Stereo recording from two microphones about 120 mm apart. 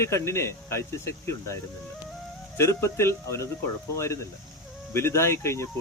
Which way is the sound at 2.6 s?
20° left (ahead or behind).